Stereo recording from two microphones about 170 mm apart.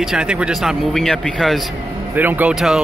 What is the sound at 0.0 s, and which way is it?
Speech, 5° right (ahead or behind).